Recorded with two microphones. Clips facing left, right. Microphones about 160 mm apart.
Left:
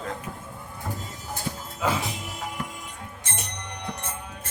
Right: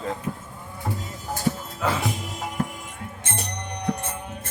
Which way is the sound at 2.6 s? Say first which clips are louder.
Right 11 dB; 50° right (ahead or behind).